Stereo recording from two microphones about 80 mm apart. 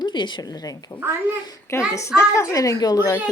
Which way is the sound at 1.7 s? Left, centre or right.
Left.